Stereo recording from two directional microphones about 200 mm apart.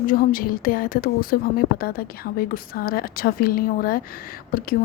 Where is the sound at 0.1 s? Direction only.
45° left (ahead or behind).